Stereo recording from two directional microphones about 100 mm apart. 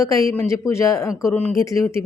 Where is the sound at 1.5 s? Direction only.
30° left (ahead or behind).